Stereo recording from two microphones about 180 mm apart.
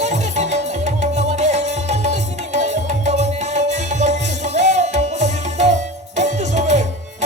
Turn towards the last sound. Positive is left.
turn(degrees=-40)  # may be behind; listen again after turning